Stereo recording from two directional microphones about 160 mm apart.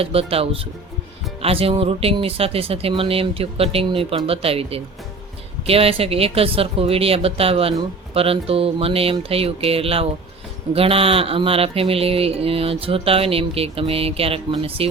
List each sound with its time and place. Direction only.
0.0 s speech: 35° right (ahead or behind)